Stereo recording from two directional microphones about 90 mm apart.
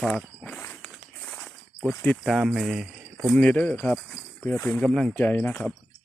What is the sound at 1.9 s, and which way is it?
Speech, 20° left (ahead or behind).